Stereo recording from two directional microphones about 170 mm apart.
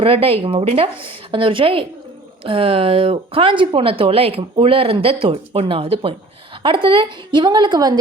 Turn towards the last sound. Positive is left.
turn(degrees=-25)  # may be behind; listen again after turning